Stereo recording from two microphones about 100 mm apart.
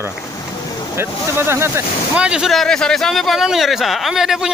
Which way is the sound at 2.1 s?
10° right (ahead or behind).